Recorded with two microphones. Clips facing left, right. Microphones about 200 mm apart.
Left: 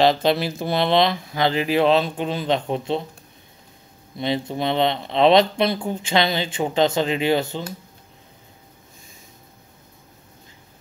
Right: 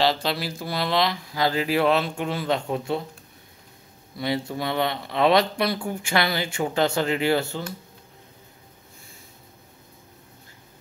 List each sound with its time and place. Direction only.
0.0 s speech: 20° left (ahead or behind)
4.2 s speech: 20° left (ahead or behind)